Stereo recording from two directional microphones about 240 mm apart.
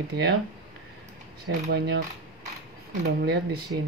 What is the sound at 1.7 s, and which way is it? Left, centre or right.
Speech, right.